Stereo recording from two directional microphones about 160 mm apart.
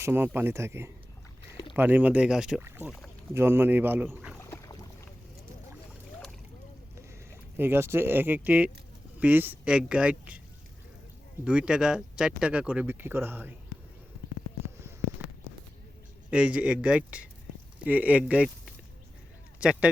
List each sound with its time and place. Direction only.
0.0 s speech: 15° right (ahead or behind)
4.4 s boat: 15° left (ahead or behind)
7.5 s speech: 15° right (ahead or behind)
11.4 s speech: 5° right (ahead or behind)
16.3 s speech: 5° right (ahead or behind)